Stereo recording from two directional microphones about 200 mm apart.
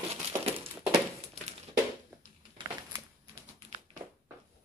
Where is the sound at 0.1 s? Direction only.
30° right (ahead or behind).